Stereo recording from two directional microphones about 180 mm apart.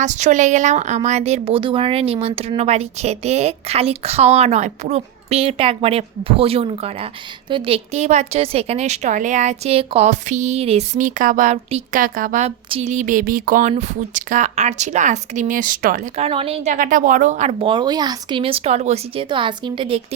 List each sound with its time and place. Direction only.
0.0 s a woman's voice: 40° right (ahead or behind)
16.1 s a woman's voice: 30° right (ahead or behind)
16.7 s a woman's voice: 45° right (ahead or behind); by 20.0 s 25° right (ahead or behind)